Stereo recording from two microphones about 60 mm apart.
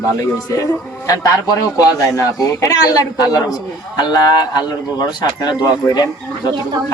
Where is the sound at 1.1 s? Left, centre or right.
Left.